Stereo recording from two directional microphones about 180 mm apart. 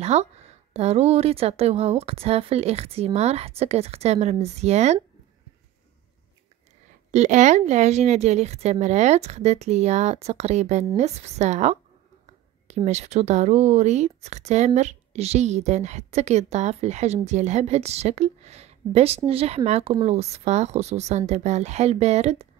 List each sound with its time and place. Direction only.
0.0 s speech: 35° right (ahead or behind)
7.1 s speech: 40° right (ahead or behind)